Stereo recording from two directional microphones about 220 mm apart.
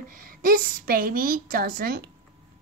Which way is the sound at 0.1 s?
40° right (ahead or behind).